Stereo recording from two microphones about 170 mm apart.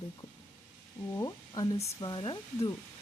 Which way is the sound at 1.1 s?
20° left (ahead or behind).